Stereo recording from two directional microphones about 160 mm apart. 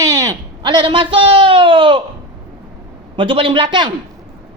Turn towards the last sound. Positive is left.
turn(degrees=-30)  # may be behind; listen again after turning